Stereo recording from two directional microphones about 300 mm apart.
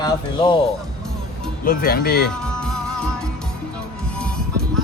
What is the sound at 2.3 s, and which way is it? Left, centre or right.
Music, centre.